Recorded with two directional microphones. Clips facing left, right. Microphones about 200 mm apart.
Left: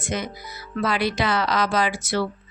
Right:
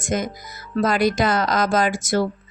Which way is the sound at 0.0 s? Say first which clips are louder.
Right 4 dB; 45° right (ahead or behind).